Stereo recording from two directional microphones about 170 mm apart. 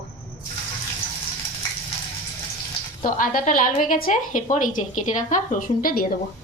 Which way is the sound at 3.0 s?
55° left (ahead or behind).